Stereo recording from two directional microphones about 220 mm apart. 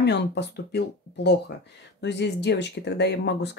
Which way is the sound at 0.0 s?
50° left (ahead or behind).